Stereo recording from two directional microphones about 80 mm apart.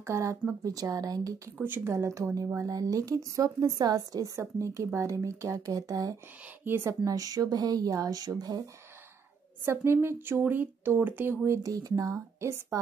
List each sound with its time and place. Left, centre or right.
0.0 s speech: right
1.6 s speech: right
6.6 s speech: right
6.9 s speech: right
9.7 s speech: right